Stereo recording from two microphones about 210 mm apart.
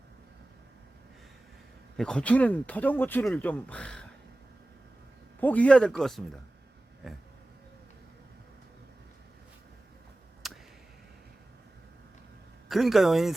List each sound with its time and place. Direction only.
2.0 s speech: 5° left (ahead or behind)
5.4 s speech: 5° left (ahead or behind)
10.4 s a sound: centre (ahead or behind)
12.6 s speech: centre (ahead or behind)